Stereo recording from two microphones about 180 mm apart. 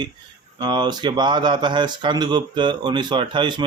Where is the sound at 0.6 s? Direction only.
25° right (ahead or behind).